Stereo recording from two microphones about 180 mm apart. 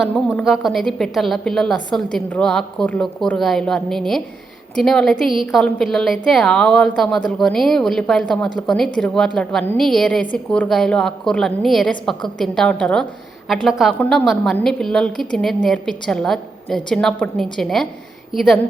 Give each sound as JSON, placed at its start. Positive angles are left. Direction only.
{"t": 0.0, "sound": "a woman's voice", "side_deg": 0}